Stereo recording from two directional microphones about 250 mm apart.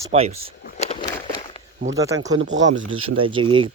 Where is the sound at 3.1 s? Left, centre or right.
Right.